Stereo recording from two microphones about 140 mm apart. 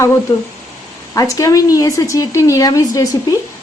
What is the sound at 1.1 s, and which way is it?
Speech, 25° left (ahead or behind).